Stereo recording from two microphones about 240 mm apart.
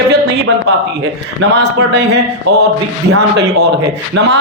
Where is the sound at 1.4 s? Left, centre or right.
Right.